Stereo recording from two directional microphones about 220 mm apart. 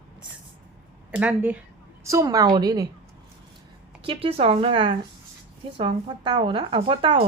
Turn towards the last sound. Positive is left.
turn(degrees=-25)  # may be behind; listen again after turning